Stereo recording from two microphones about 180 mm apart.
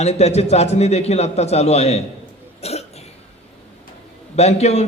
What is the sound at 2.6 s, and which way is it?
Cough, 35° left (ahead or behind).